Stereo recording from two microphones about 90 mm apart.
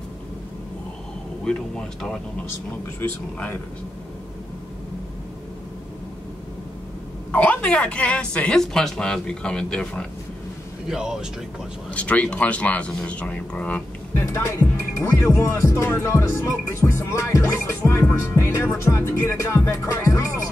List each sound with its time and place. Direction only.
1.4 s speech: 10° left (ahead or behind)
7.3 s speech: 15° left (ahead or behind)
10.9 s speech: 5° right (ahead or behind)
11.9 s speech: 15° left (ahead or behind)
14.2 s speech: 30° left (ahead or behind)
18.1 s music: 30° left (ahead or behind)